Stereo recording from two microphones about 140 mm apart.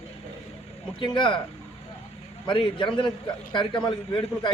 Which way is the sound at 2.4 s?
35° left (ahead or behind).